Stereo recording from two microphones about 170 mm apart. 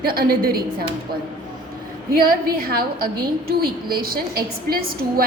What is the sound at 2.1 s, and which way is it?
A woman's voice, 60° right (ahead or behind).